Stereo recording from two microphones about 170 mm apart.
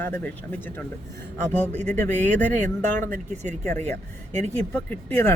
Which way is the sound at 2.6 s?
50° right (ahead or behind).